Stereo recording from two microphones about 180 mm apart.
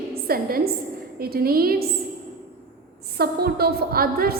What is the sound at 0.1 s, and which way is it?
A woman's voice, 55° right (ahead or behind).